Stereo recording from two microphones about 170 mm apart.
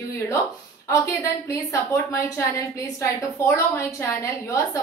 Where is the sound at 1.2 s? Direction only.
20° left (ahead or behind).